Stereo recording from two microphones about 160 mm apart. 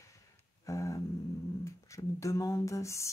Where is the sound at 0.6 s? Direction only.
20° left (ahead or behind).